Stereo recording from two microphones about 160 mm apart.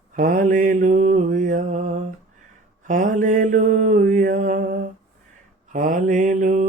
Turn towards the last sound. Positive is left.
turn(degrees=-55)  # may be behind; listen again after turning